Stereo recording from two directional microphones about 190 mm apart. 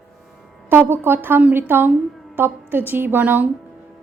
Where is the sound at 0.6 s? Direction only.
10° right (ahead or behind).